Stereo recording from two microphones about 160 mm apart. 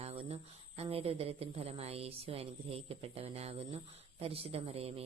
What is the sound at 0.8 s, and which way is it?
Speech, 35° right (ahead or behind).